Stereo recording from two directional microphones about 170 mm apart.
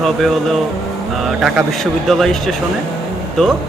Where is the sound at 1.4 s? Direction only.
Centre (ahead or behind).